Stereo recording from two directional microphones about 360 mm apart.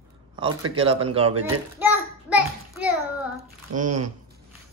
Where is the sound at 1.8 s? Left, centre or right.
Centre.